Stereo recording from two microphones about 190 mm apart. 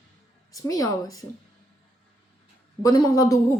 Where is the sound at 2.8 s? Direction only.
20° left (ahead or behind).